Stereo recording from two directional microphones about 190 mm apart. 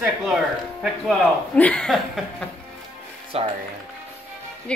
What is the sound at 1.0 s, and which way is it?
A woman's voice, 5° left (ahead or behind).